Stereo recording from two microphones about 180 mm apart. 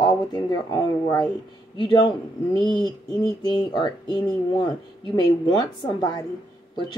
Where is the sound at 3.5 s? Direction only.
25° left (ahead or behind).